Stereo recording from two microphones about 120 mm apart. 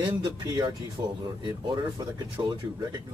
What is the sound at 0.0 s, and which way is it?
Speech, 40° right (ahead or behind).